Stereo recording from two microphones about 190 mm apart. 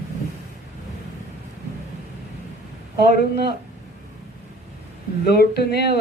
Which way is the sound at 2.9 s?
55° left (ahead or behind).